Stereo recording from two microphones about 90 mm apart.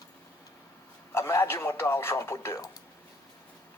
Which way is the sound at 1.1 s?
30° left (ahead or behind).